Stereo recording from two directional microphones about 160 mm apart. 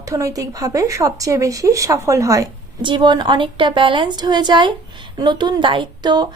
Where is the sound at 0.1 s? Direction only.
20° right (ahead or behind).